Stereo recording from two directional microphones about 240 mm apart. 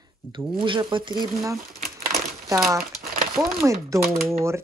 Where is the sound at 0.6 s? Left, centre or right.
Centre.